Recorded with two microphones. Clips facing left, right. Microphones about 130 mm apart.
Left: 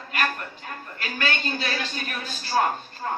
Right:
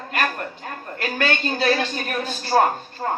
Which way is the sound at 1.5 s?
45° right (ahead or behind).